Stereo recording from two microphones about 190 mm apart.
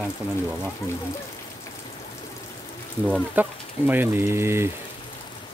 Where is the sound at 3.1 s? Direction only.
10° right (ahead or behind).